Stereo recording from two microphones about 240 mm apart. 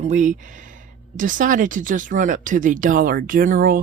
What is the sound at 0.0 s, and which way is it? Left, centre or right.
Speech, right.